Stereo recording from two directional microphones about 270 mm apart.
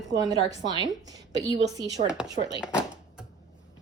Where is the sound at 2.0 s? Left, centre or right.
Centre.